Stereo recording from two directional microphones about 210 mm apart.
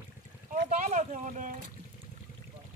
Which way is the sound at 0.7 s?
35° right (ahead or behind).